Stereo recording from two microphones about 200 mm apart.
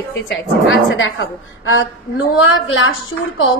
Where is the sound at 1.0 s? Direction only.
80° left.